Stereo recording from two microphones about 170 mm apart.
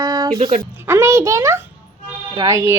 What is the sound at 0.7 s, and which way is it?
Speech, 15° right (ahead or behind).